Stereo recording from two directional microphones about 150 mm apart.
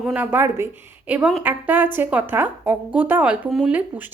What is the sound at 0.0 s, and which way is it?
A woman's voice, 10° right (ahead or behind).